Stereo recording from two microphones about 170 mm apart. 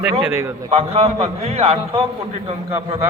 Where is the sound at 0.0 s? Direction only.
10° right (ahead or behind).